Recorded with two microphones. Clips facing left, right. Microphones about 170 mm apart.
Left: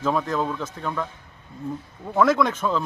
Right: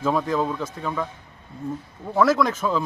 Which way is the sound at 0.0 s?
5° right (ahead or behind).